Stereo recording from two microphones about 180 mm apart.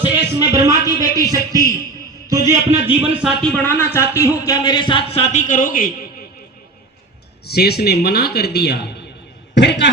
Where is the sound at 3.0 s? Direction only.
5° right (ahead or behind).